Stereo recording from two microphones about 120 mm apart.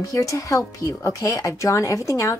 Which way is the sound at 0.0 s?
30° left (ahead or behind).